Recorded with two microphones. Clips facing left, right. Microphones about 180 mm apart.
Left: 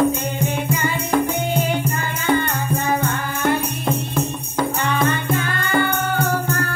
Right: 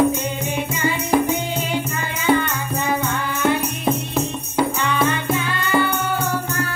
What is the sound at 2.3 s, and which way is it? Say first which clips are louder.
Music: right 1 dB; 10° right (ahead or behind).